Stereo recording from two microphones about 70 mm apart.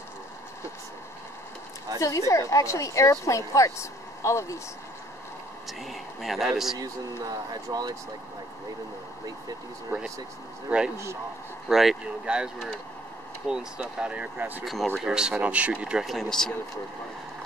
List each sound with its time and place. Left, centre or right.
2.0 s a woman's voice: left
5.7 s speech: centre
6.8 s speech: right
10.7 s speech: centre
11.7 s speech: centre
13.5 s speech: centre
14.6 s speech: centre
15.0 s speech: centre
16.0 s speech: centre